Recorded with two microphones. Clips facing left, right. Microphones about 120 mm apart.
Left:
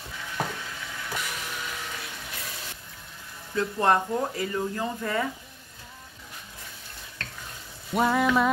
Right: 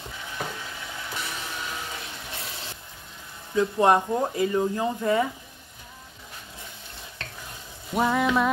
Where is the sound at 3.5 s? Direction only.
15° right (ahead or behind).